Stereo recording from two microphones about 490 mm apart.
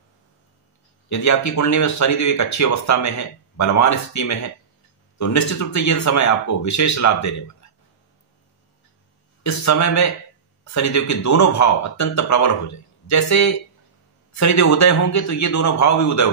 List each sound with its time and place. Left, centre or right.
1.0 s speech: left
9.4 s speech: left